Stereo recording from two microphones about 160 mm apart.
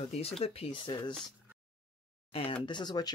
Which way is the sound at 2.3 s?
35° left (ahead or behind).